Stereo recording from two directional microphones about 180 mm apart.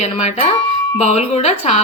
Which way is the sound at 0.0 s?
35° left (ahead or behind).